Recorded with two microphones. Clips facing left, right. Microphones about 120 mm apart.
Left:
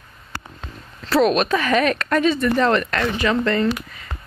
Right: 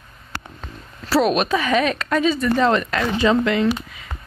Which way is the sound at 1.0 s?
5° right (ahead or behind).